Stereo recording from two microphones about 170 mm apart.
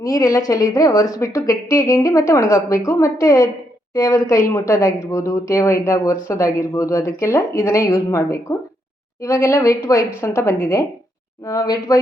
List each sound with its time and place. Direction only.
0.0 s a woman's voice: 20° left (ahead or behind)